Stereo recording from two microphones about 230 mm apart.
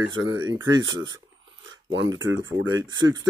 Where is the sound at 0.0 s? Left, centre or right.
Right.